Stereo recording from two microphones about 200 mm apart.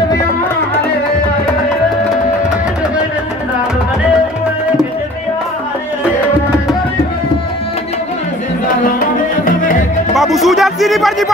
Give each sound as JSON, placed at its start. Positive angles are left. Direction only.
{"t": 8.8, "sound": "music", "side_deg": 45}
{"t": 10.1, "sound": "music", "side_deg": 0}